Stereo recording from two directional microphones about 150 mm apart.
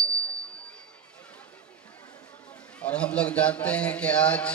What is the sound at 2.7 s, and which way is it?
A man's voice, 5° left (ahead or behind).